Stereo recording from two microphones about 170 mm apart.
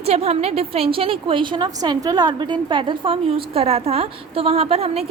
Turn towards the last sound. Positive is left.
turn(degrees=-35)  # may be behind; listen again after turning